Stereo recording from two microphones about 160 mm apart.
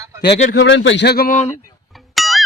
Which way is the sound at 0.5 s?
90° left.